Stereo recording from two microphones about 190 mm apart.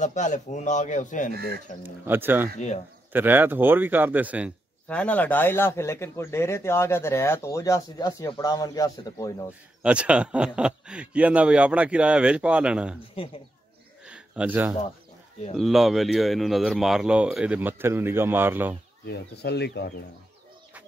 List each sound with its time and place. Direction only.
0.0 s speech: 40° left (ahead or behind)
1.8 s speech: 10° right (ahead or behind)
4.8 s speech: 5° left (ahead or behind)
9.8 s speech: 5° right (ahead or behind)
14.0 s a sound: 5° right (ahead or behind)
15.5 s speech: centre (ahead or behind)
19.0 s speech: 60° left (ahead or behind)